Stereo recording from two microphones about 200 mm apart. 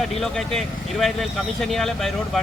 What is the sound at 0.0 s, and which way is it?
Speech, centre (ahead or behind).